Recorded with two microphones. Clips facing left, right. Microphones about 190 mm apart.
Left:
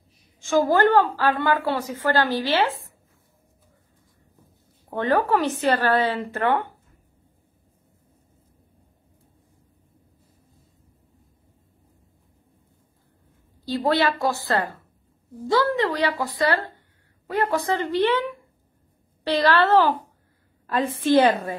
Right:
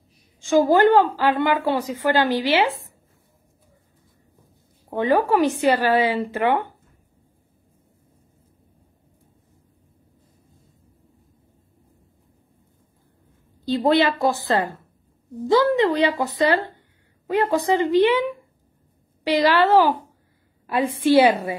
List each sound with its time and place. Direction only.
0.4 s a woman's voice: 15° right (ahead or behind)
4.8 s a woman's voice: 10° right (ahead or behind)
13.7 s a woman's voice: 20° right (ahead or behind)